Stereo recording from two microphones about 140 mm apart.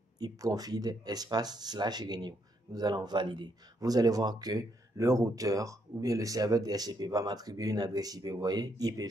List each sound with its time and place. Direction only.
0.2 s speech: 25° right (ahead or behind)